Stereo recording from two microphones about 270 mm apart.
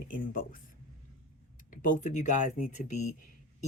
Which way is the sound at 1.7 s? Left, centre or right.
Left.